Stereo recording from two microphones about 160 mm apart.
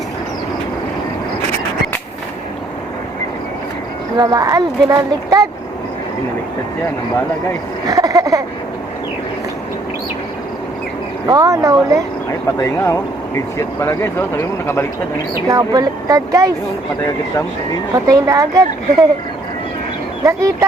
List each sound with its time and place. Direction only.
4.2 s speech: 25° right (ahead or behind)
7.9 s a sound: 20° right (ahead or behind)
11.3 s speech: 20° right (ahead or behind)
12.5 s speech: 20° left (ahead or behind)
15.4 s speech: 20° right (ahead or behind)
17.0 s speech: 20° left (ahead or behind)
17.9 s speech: 20° right (ahead or behind)
20.2 s speech: 20° right (ahead or behind)